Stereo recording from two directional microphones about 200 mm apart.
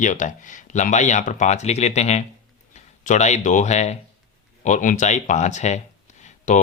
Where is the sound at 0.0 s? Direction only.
40° left (ahead or behind).